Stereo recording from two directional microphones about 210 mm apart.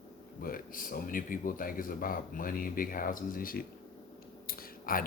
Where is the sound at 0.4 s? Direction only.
40° left (ahead or behind).